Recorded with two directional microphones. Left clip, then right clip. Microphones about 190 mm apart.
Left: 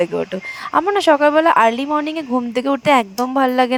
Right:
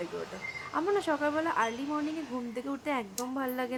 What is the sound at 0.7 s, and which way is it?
Speech, 50° left (ahead or behind).